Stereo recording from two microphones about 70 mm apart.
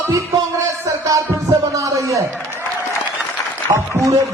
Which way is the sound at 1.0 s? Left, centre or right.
Right.